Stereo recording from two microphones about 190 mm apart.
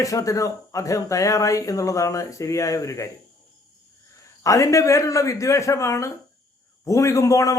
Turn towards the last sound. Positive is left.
turn(degrees=15)  # may be behind; listen again after turning